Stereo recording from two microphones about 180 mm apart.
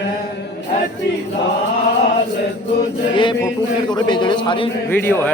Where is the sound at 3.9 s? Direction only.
25° left (ahead or behind).